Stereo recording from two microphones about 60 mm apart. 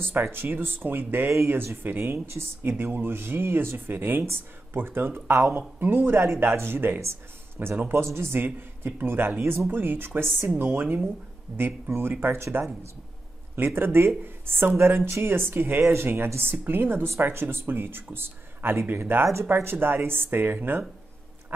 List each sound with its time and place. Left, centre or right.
0.0 s speech: right
13.7 s speech: right